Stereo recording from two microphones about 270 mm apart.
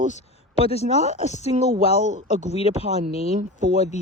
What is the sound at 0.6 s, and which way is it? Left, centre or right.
Speech, left.